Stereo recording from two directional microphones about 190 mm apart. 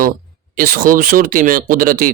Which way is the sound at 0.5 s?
50° right (ahead or behind).